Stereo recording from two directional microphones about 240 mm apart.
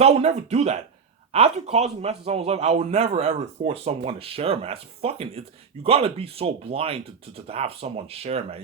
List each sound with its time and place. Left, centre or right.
0.0 s a man's voice: right